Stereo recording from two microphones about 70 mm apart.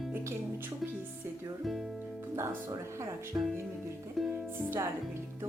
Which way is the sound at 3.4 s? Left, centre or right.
Right.